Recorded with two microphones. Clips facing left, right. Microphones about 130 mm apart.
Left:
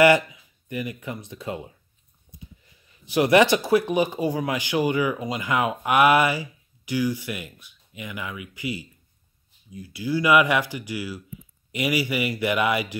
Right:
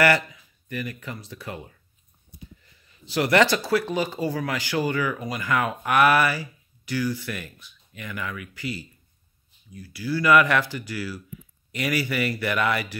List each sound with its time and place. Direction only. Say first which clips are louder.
0.0 s speech: left 4 dB; 20° left (ahead or behind)